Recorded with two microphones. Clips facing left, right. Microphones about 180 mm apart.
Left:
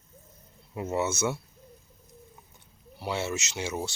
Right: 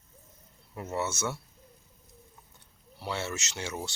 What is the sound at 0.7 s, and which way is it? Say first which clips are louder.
Speech: left 4 dB; 15° left (ahead or behind).